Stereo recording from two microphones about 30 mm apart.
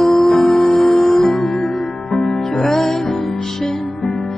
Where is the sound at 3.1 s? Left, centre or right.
Left.